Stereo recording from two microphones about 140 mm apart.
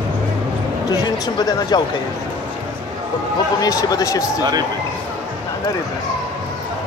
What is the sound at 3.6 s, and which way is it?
Speech, 25° left (ahead or behind).